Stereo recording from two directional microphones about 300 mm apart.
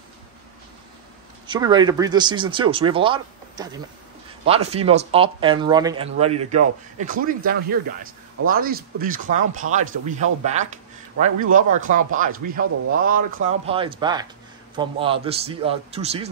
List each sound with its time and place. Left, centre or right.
1.5 s speech: centre